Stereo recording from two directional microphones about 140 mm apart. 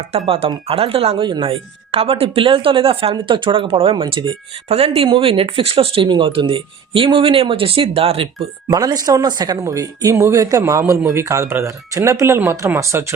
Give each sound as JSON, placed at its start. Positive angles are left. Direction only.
{"t": 0.3, "sound": "speech", "side_deg": -40}
{"t": 8.6, "sound": "speech", "side_deg": -25}